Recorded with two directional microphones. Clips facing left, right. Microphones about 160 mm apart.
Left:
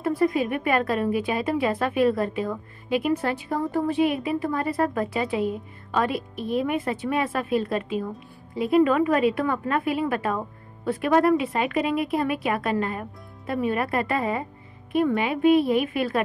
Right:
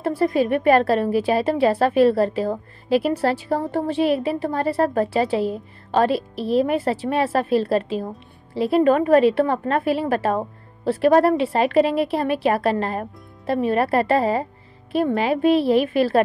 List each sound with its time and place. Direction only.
0.0 s a woman's voice: 30° right (ahead or behind)